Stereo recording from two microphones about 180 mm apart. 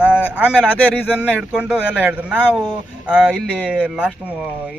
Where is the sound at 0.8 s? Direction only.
5° left (ahead or behind).